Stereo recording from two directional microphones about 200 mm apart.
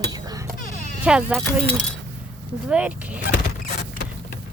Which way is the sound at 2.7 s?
5° right (ahead or behind).